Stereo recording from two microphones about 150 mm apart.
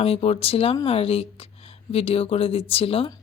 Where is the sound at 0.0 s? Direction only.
40° left (ahead or behind).